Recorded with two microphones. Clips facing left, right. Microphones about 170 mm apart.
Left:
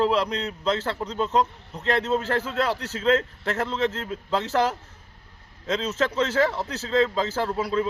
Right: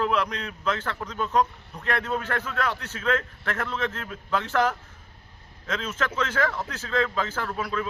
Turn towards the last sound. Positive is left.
turn(degrees=25)  # may be behind; listen again after turning